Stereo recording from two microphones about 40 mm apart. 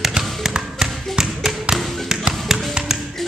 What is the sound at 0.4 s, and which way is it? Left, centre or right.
Tap, centre.